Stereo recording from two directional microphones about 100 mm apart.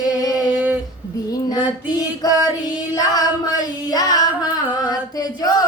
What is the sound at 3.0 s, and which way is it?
Singing, 40° left (ahead or behind).